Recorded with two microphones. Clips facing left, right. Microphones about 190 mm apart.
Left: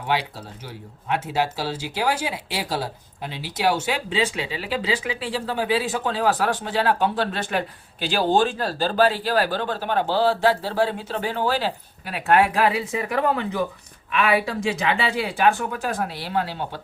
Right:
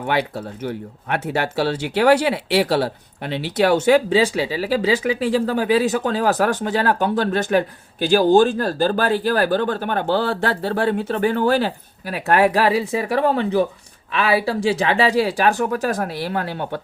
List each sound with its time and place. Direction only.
0.1 s speech: 55° right (ahead or behind)
4.1 s speech: 35° right (ahead or behind); by 16.8 s 55° right (ahead or behind)